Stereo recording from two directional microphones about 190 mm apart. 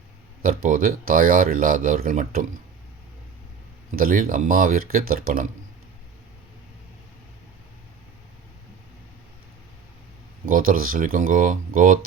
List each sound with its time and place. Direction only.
0.4 s speech: 45° right (ahead or behind)
3.9 s speech: 50° right (ahead or behind)
10.4 s speech: 45° right (ahead or behind)